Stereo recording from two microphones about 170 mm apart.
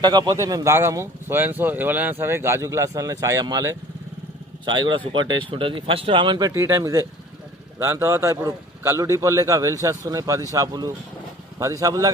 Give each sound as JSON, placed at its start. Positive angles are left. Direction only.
{"t": 0.0, "sound": "speech", "side_deg": -25}
{"t": 6.5, "sound": "speech", "side_deg": -15}